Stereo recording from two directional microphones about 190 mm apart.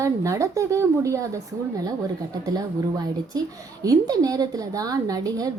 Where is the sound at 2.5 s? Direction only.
20° right (ahead or behind).